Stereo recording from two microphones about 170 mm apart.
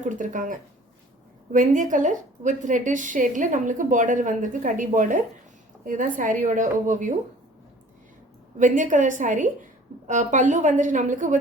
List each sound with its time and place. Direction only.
0.0 s a woman's voice: 50° right (ahead or behind)
8.5 s a woman's voice: 50° right (ahead or behind)